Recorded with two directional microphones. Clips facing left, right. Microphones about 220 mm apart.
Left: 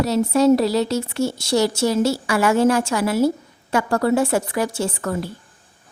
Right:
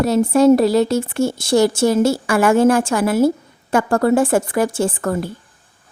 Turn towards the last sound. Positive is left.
turn(degrees=-50)  # may be behind; listen again after turning